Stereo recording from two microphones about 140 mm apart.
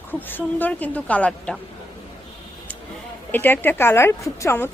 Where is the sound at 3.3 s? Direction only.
15° left (ahead or behind).